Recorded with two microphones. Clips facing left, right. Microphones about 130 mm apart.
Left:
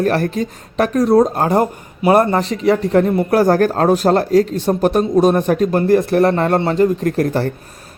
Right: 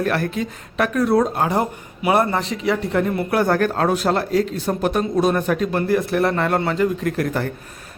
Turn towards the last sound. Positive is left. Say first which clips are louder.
# left 5 dB
turn(degrees=35)  # may be behind; listen again after turning